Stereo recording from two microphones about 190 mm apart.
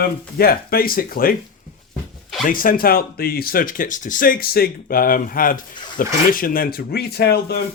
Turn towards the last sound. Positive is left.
turn(degrees=55)  # may be behind; listen again after turning